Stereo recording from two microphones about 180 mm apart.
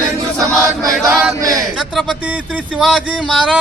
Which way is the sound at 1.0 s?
20° right (ahead or behind).